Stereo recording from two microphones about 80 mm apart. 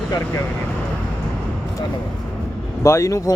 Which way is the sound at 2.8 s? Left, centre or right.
Left.